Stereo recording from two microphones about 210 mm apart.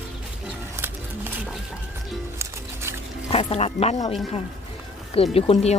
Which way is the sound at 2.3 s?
10° right (ahead or behind).